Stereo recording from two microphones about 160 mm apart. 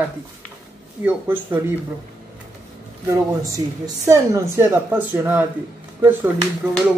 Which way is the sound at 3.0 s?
20° right (ahead or behind).